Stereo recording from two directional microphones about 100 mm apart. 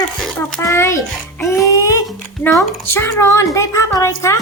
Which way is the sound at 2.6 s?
25° left (ahead or behind).